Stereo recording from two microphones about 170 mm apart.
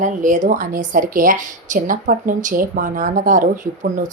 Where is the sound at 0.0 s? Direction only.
50° right (ahead or behind).